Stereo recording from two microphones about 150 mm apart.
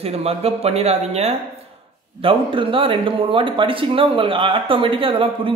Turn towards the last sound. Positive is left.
turn(degrees=-35)  # may be behind; listen again after turning